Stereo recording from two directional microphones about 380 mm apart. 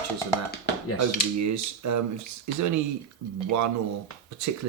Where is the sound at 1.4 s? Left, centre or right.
Right.